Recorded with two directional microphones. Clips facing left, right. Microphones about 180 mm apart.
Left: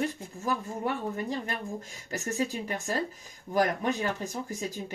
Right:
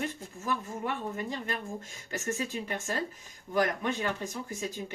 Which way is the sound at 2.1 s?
35° left (ahead or behind).